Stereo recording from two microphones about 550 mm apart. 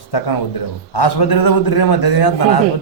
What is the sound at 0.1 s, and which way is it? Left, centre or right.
A man's voice, left.